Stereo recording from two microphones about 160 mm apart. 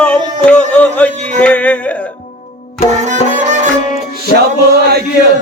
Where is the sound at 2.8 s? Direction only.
50° right (ahead or behind).